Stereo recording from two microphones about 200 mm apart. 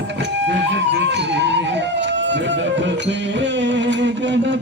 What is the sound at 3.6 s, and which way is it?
Music, 60° right (ahead or behind).